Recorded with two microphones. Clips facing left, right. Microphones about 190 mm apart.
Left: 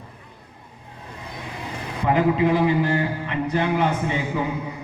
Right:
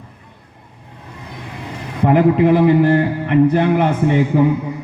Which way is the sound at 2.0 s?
55° right (ahead or behind).